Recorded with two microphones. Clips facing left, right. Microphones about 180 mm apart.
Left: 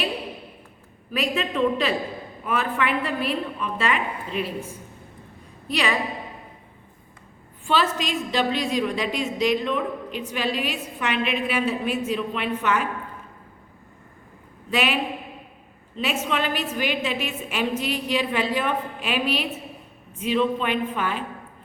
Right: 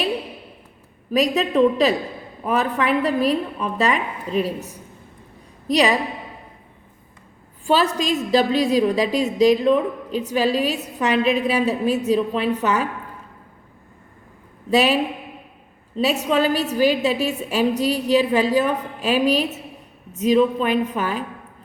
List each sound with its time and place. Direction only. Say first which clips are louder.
1.1 s a woman's voice: right 7 dB; 40° right (ahead or behind)
7.9 s a woman's voice: right 6 dB; 40° right (ahead or behind)
14.7 s a woman's voice: right 7 dB; 35° right (ahead or behind)
16.0 s a woman's voice: right 7 dB; 35° right (ahead or behind)